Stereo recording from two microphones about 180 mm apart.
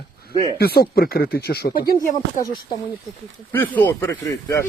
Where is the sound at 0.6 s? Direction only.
60° left (ahead or behind).